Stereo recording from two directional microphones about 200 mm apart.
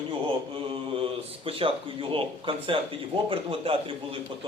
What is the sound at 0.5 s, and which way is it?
A man's voice, 25° right (ahead or behind).